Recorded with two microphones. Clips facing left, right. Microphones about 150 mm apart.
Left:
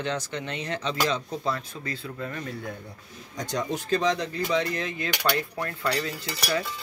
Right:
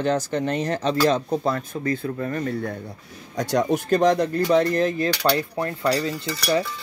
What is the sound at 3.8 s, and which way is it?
Speech, 55° right (ahead or behind).